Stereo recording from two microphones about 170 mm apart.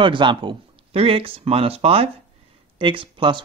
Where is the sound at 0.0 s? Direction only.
30° right (ahead or behind).